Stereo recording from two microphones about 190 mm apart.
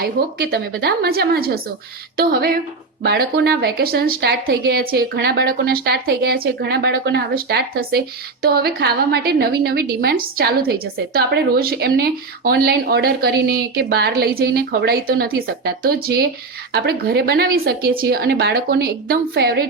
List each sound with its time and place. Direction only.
0.0 s a woman's voice: 55° right (ahead or behind)